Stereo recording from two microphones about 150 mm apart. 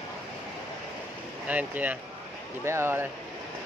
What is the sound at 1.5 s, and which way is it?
Speech, 10° right (ahead or behind).